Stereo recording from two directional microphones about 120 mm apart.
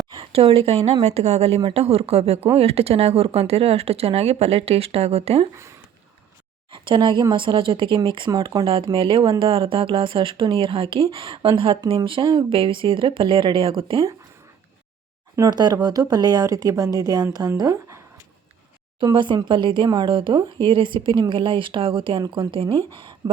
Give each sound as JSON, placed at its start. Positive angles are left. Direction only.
{"t": 0.1, "sound": "a woman's voice", "side_deg": -50}
{"t": 6.7, "sound": "speech", "side_deg": -45}
{"t": 8.7, "sound": "speech", "side_deg": -45}
{"t": 11.8, "sound": "speech", "side_deg": -30}
{"t": 15.4, "sound": "a woman's voice", "side_deg": -35}
{"t": 19.0, "sound": "speech", "side_deg": -40}